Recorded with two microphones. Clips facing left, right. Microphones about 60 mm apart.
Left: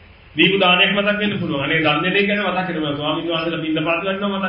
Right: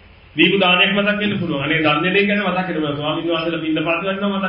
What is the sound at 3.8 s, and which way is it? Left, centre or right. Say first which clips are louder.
Speech: even; right.